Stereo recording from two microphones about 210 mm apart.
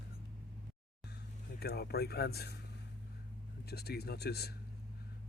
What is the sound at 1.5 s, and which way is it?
Speech, 50° left (ahead or behind).